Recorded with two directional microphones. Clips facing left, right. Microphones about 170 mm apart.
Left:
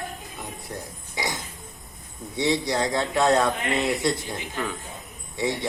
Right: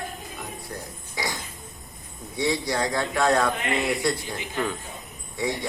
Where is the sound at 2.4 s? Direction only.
20° left (ahead or behind).